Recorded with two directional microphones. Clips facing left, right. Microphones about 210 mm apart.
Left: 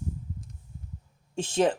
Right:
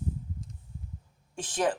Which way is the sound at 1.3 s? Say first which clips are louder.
Left 4 dB; 25° left (ahead or behind).